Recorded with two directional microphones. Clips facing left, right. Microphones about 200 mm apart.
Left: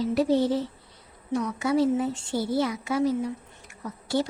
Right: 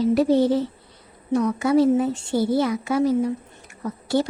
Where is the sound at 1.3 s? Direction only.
55° right (ahead or behind).